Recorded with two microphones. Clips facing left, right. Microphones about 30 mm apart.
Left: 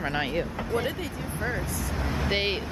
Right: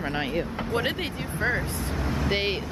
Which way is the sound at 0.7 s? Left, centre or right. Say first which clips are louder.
Right 2 dB; right.